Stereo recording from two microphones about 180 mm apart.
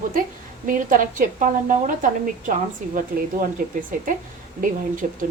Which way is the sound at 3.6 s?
50° right (ahead or behind).